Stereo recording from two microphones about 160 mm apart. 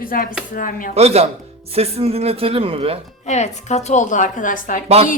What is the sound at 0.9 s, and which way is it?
Speech, 40° right (ahead or behind).